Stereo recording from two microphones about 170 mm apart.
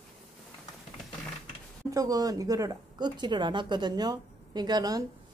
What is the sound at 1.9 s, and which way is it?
Speech, 20° right (ahead or behind).